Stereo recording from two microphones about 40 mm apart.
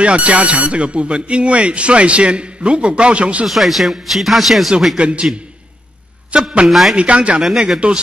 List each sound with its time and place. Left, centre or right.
0.0 s speech: right
3.4 s a man's voice: centre
4.9 s a man's voice: right
6.3 s speech: right
6.7 s a man's voice: centre
7.0 s speech: right